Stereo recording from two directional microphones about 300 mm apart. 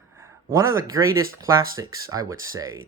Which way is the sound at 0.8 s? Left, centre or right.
Centre.